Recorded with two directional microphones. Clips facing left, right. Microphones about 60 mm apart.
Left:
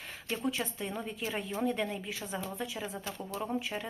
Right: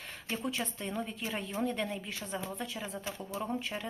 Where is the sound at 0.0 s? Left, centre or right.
Centre.